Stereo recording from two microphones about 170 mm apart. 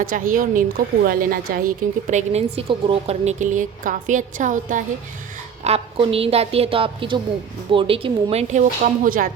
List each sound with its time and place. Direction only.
0.0 s a woman's voice: 55° right (ahead or behind)
5.6 s speech: 35° right (ahead or behind); by 9.3 s 55° right (ahead or behind)